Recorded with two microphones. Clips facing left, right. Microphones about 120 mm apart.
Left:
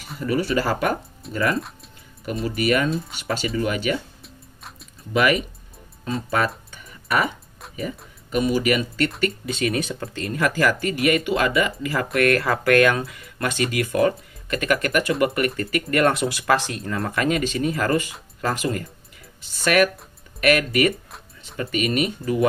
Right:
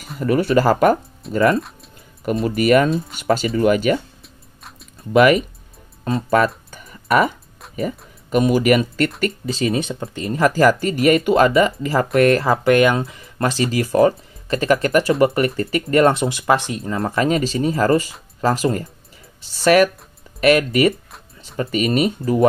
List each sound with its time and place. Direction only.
0.2 s speech: 45° right (ahead or behind)
1.3 s speech: 30° right (ahead or behind)
2.4 s speech: 45° right (ahead or behind)
4.2 s music: centre (ahead or behind)
6.7 s music: 40° right (ahead or behind)
7.6 s music: centre (ahead or behind)
8.3 s speech: 50° right (ahead or behind)
9.2 s speech: 30° right (ahead or behind)